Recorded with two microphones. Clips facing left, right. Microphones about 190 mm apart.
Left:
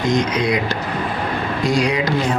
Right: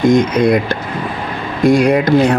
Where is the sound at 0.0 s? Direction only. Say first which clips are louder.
Right 7 dB; 55° right (ahead or behind).